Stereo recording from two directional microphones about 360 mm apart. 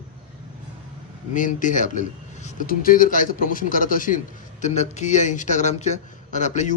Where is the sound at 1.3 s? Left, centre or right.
Left.